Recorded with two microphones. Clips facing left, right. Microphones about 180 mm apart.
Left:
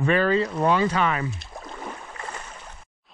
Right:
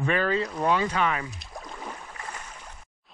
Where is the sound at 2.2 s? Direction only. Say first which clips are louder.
Left 3 dB; 25° left (ahead or behind).